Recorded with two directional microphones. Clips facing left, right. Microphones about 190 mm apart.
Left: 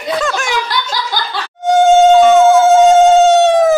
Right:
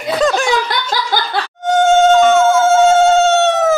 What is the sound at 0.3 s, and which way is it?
Snicker, 30° right (ahead or behind).